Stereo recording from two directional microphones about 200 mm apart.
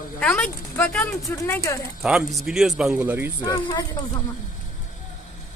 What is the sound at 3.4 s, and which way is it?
Speech, 20° left (ahead or behind).